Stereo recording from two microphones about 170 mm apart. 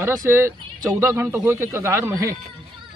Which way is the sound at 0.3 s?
15° right (ahead or behind).